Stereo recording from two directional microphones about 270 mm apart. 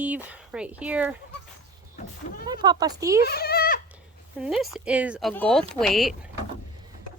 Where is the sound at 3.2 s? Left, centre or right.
Left.